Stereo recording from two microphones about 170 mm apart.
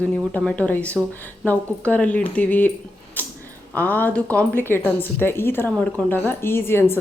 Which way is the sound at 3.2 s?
10° left (ahead or behind).